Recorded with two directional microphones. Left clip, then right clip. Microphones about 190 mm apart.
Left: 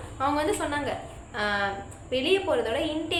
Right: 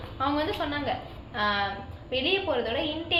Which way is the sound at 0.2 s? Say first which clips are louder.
Left 2 dB; 15° left (ahead or behind).